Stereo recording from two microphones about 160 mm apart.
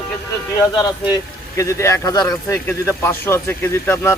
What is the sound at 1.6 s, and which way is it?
Speech, 20° left (ahead or behind).